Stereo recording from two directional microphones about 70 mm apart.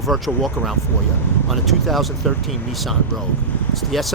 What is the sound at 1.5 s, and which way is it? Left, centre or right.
Speech, centre.